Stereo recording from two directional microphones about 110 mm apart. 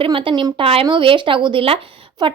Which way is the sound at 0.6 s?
60° right (ahead or behind).